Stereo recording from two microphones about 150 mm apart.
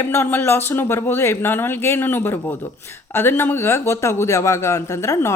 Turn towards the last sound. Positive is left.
turn(degrees=20)  # may be behind; listen again after turning